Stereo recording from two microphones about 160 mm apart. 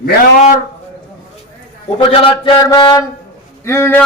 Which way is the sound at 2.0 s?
35° left (ahead or behind).